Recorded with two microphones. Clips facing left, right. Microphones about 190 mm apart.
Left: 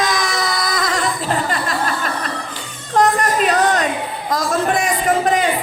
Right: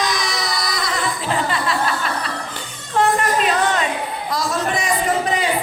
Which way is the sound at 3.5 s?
40° left (ahead or behind).